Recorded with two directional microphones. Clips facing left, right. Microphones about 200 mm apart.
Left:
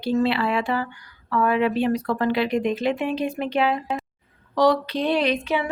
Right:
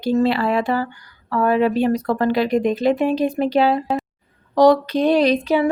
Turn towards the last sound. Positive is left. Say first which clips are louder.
# right 7 dB
turn(degrees=-40)  # may be behind; listen again after turning